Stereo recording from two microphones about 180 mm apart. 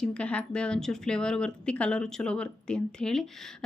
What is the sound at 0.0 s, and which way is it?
Speech, 5° left (ahead or behind).